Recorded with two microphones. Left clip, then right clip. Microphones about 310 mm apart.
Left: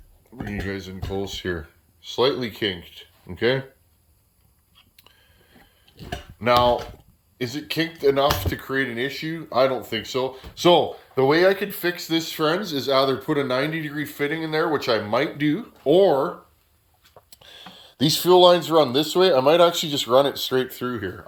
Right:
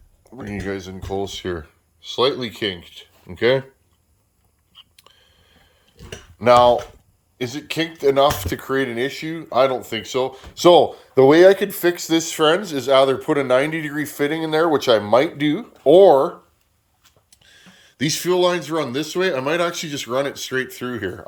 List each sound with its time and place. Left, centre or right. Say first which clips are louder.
0.4 s speech: right 3 dB; centre
5.1 s a sound: right 3 dB; centre
6.4 s speech: right 6 dB; centre
17.3 s speech: left 5 dB; centre